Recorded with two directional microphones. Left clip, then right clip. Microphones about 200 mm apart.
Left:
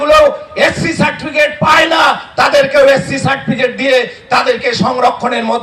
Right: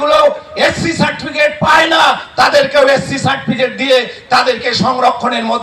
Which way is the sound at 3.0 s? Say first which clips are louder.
Left 1 dB; 35° left (ahead or behind).